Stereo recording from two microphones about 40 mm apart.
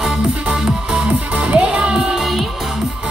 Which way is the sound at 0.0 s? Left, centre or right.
Right.